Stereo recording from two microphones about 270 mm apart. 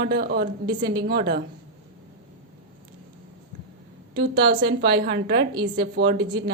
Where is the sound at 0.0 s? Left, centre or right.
Right.